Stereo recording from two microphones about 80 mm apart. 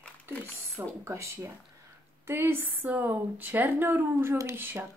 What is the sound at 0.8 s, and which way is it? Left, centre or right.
Speech, right.